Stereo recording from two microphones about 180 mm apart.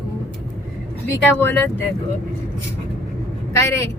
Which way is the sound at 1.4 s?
10° left (ahead or behind).